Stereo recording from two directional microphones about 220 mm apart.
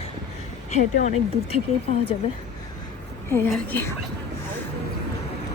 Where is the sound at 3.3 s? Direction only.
10° left (ahead or behind).